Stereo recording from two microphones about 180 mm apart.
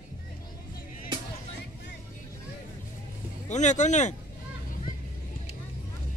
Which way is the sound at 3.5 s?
40° left (ahead or behind).